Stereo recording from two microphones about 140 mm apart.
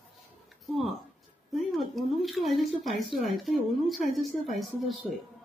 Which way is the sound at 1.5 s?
Centre (ahead or behind).